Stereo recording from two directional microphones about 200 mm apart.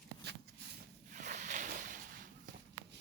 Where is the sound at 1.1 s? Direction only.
40° right (ahead or behind).